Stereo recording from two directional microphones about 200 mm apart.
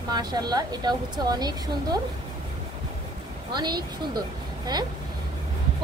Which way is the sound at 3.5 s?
20° right (ahead or behind).